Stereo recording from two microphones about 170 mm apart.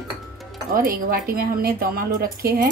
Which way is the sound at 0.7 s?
60° right (ahead or behind).